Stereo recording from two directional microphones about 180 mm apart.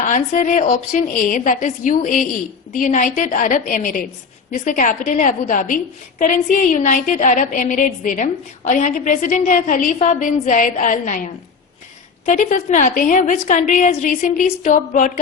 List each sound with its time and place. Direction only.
0.0 s a woman's voice: 45° left (ahead or behind)
12.2 s a woman's voice: 45° left (ahead or behind)